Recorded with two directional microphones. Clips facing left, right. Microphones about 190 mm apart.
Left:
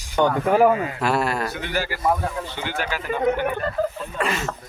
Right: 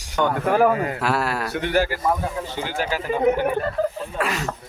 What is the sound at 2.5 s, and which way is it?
Speech, 35° right (ahead or behind).